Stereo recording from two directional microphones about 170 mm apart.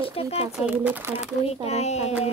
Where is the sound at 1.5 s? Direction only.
40° left (ahead or behind).